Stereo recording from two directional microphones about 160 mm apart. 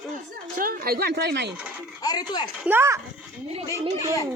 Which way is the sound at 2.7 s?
15° right (ahead or behind).